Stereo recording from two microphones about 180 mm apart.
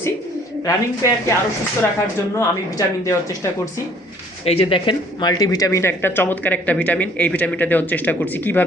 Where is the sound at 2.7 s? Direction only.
15° left (ahead or behind).